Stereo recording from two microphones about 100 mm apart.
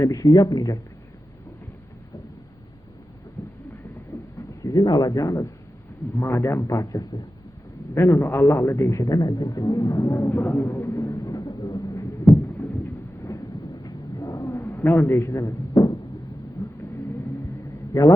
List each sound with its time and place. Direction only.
0.0 s speech: 35° left (ahead or behind)
4.1 s a sound: 30° left (ahead or behind)
4.6 s speech: 40° left (ahead or behind)
6.1 s a man's voice: 25° left (ahead or behind)
7.9 s a man's voice: 25° left (ahead or behind); by 12.0 s 40° left (ahead or behind)
12.3 s a sound: 5° left (ahead or behind)
13.3 s thunder: 30° left (ahead or behind)
13.8 s a sound: 35° left (ahead or behind)
17.9 s speech: 35° left (ahead or behind)